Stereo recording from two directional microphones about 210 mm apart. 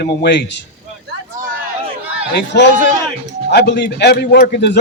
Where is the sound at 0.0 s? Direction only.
50° left (ahead or behind).